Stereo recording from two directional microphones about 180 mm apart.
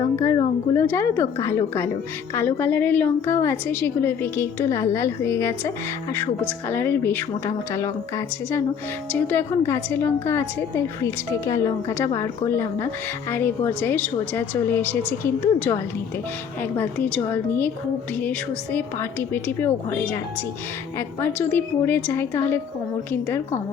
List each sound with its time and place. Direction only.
0.3 s a woman's voice: 15° left (ahead or behind)
9.1 s a woman's voice: 10° left (ahead or behind)
21.2 s a woman's voice: 10° left (ahead or behind)